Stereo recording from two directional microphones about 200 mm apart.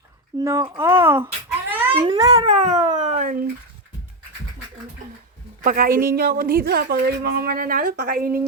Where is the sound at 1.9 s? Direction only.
20° right (ahead or behind).